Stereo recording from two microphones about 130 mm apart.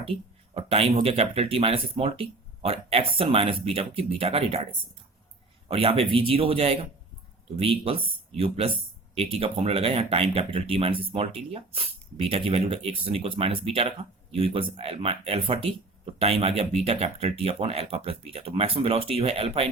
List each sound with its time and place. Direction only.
0.0 s speech: 45° right (ahead or behind)
5.6 s speech: 45° right (ahead or behind)